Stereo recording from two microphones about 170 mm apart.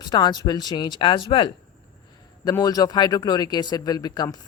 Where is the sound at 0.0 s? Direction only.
25° left (ahead or behind).